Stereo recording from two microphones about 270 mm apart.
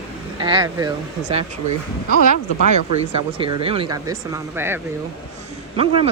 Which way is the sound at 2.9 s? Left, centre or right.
Centre.